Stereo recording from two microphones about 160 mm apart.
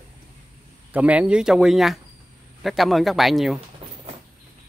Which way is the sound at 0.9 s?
10° right (ahead or behind).